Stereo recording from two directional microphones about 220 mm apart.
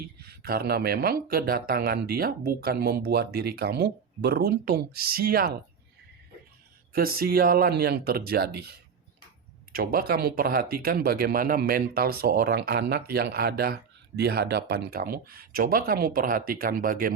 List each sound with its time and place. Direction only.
0.2 s speech: 45° right (ahead or behind)
6.9 s speech: 40° right (ahead or behind)
9.7 s speech: 45° right (ahead or behind)